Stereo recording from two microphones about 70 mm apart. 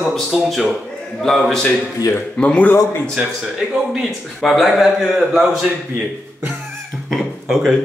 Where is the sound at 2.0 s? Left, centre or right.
Left.